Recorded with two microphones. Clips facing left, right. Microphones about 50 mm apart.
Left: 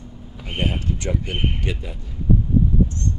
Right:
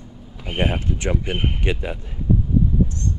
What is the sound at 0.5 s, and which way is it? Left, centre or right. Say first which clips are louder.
Speech: right 2 dB; right.